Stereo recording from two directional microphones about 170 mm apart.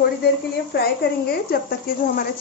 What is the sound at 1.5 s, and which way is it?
Speech, 65° left (ahead or behind).